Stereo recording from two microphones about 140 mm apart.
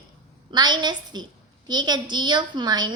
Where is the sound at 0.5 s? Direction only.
30° right (ahead or behind).